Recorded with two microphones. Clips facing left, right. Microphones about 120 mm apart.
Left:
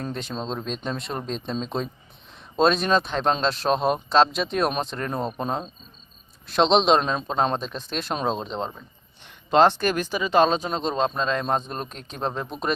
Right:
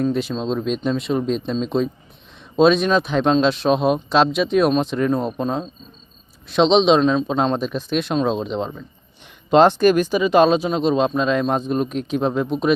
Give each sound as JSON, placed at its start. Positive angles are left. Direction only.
{"t": 0.0, "sound": "speech", "side_deg": -5}
{"t": 9.5, "sound": "speech", "side_deg": -15}